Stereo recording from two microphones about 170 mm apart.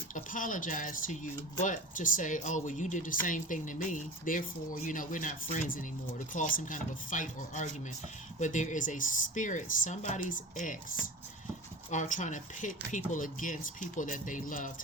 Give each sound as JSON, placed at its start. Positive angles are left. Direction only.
{"t": 0.1, "sound": "speech", "side_deg": 50}